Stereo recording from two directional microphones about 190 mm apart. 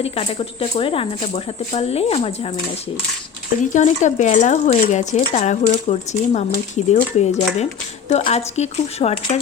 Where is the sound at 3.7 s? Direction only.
40° left (ahead or behind).